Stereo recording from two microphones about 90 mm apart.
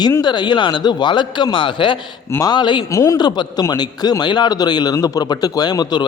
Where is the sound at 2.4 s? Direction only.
55° left (ahead or behind).